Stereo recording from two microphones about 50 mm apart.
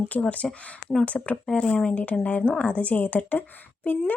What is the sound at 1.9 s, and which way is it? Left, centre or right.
A woman's voice, left.